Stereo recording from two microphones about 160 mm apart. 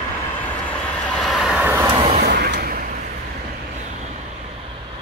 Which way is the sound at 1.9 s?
35° right (ahead or behind).